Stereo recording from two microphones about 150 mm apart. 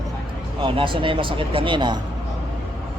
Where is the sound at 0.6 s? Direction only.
35° right (ahead or behind).